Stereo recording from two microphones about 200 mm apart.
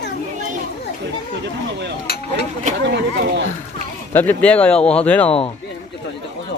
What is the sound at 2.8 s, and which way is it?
Speech, 50° right (ahead or behind).